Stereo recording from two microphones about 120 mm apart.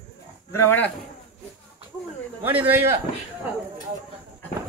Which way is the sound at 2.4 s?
15° right (ahead or behind).